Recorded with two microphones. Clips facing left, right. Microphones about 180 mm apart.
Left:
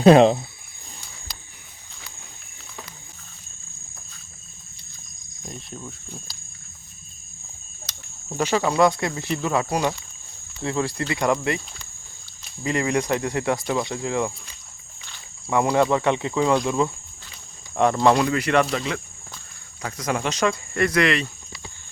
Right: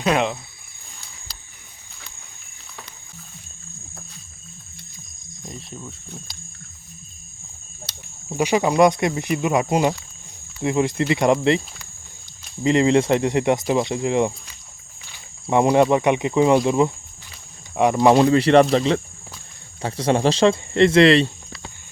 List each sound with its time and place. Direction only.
0.0 s speech: 35° left (ahead or behind)
5.5 s speech: centre (ahead or behind)
8.3 s speech: 15° right (ahead or behind)
12.6 s speech: 25° right (ahead or behind)
15.4 s speech: 20° right (ahead or behind)
18.2 s speech: 30° right (ahead or behind)